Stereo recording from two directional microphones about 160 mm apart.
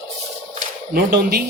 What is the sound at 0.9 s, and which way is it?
Speech, 75° right (ahead or behind).